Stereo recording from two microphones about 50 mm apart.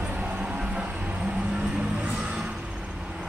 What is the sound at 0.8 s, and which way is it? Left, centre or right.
Music, centre.